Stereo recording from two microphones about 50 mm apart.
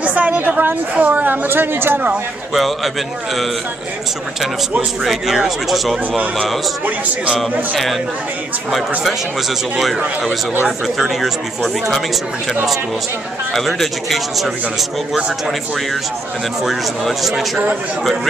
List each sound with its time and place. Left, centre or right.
0.0 s a sound: right
0.9 s speech: right
2.5 s speech: centre
4.4 s speech: centre
7.3 s speech: centre
11.0 s speech: centre
13.5 s speech: centre
16.6 s speech: centre